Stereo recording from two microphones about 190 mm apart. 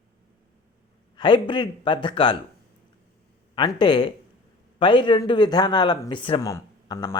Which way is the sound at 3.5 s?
25° left (ahead or behind).